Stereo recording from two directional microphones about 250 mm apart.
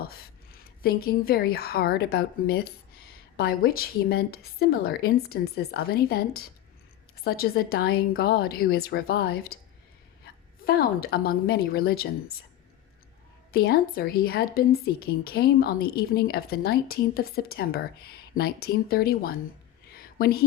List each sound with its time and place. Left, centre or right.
0.0 s a woman's voice: left
10.7 s a woman's voice: left
13.5 s a woman's voice: left
19.9 s a sound: left